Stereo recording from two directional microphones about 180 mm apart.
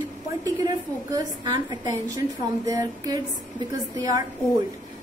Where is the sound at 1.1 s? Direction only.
25° right (ahead or behind).